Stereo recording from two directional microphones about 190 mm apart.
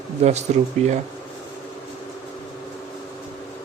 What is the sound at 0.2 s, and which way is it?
Speech, 35° right (ahead or behind).